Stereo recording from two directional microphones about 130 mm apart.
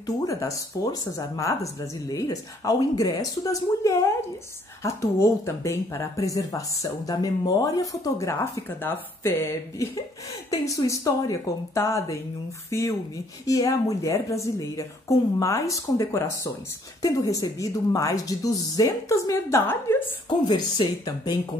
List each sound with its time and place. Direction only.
0.0 s speech: 25° left (ahead or behind)
20.4 s speech: 35° left (ahead or behind)